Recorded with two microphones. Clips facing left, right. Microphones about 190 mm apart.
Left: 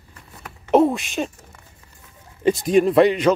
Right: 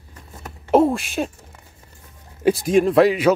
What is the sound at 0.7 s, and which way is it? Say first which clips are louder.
Speech: even; 5° right (ahead or behind).